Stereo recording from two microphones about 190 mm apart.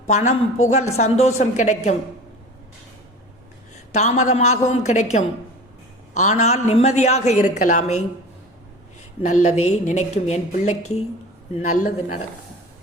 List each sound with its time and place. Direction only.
0.1 s a man's voice: 35° left (ahead or behind)
3.9 s a man's voice: 35° left (ahead or behind)
9.3 s a man's voice: 40° left (ahead or behind)